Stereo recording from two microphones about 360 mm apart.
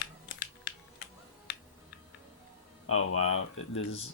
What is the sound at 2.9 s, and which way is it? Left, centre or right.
Speech, left.